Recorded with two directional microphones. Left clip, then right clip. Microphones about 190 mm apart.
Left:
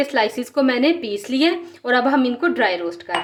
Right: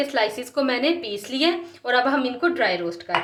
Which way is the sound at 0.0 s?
30° left (ahead or behind).